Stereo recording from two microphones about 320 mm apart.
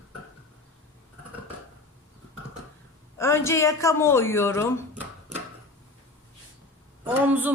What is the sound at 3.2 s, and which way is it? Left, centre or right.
A woman's voice, centre.